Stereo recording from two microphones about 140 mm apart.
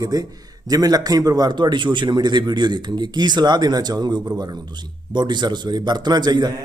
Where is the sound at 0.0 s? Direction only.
25° right (ahead or behind).